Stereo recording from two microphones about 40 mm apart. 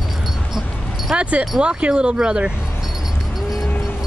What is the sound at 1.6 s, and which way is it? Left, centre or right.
Speech, right.